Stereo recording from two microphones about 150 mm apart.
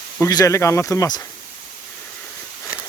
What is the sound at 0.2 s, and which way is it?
Speech, 20° left (ahead or behind).